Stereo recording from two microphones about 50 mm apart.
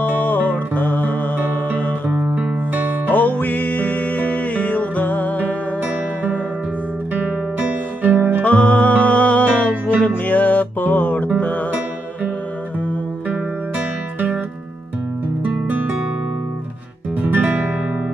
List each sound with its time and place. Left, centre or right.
0.1 s music: left
2.3 s music: right
3.1 s music: left
8.0 s music: right
8.5 s music: left
17.4 s guitar: right